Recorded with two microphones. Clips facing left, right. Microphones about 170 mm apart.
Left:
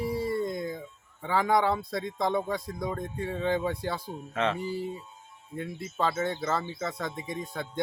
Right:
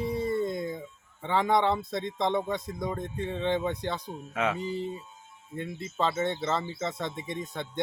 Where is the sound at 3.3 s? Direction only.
5° left (ahead or behind).